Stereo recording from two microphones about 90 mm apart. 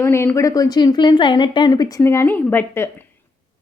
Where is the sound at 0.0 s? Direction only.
30° left (ahead or behind); by 2.0 s 45° left (ahead or behind).